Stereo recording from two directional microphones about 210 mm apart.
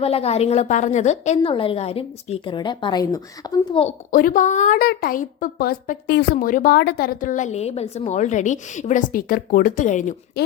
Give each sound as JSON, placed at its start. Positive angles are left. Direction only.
{"t": 0.0, "sound": "a woman's voice", "side_deg": 30}
{"t": 4.1, "sound": "a woman's voice", "side_deg": 40}